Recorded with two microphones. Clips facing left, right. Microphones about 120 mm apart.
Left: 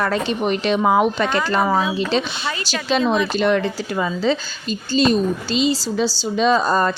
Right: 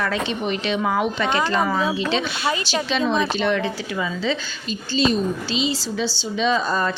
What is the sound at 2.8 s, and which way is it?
A woman's voice, 40° left (ahead or behind).